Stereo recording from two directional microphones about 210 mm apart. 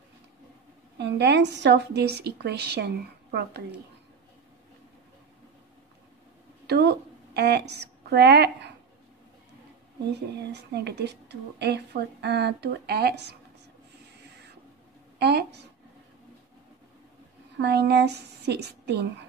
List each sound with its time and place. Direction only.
0.9 s a woman's voice: 55° right (ahead or behind)
6.7 s a woman's voice: 50° right (ahead or behind)
10.5 s a woman's voice: 50° right (ahead or behind)
15.1 s speech: 50° right (ahead or behind)
17.6 s a woman's voice: 55° right (ahead or behind)